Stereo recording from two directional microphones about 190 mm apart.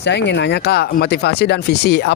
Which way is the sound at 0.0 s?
65° left (ahead or behind).